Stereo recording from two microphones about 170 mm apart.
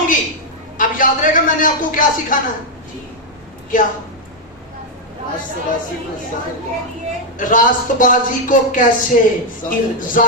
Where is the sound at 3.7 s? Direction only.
50° left (ahead or behind).